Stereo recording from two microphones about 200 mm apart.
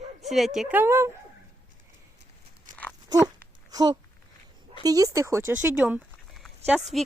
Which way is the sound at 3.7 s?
20° right (ahead or behind).